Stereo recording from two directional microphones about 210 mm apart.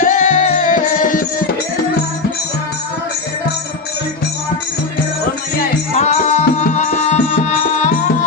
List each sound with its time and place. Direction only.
0.0 s music: 35° left (ahead or behind)
5.9 s music: 35° left (ahead or behind)